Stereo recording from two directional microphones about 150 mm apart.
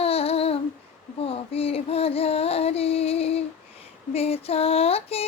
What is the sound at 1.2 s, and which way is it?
Music, 40° left (ahead or behind).